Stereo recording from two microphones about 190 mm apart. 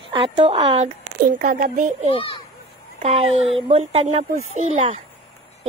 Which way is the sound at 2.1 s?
25° left (ahead or behind).